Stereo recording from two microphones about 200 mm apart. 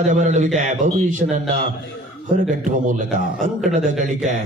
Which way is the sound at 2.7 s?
40° right (ahead or behind).